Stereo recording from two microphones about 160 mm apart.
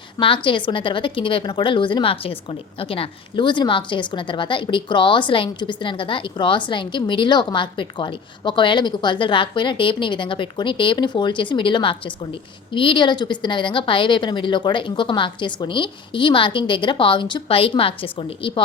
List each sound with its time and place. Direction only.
0.4 s a woman's voice: 30° left (ahead or behind)